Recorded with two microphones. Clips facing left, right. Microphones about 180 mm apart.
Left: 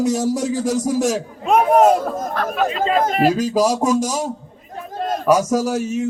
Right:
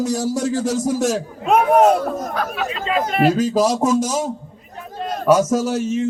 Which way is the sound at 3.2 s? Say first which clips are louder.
Right 3 dB; 5° left (ahead or behind).